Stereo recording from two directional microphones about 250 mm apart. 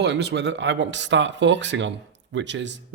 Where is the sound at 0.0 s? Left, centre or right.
Right.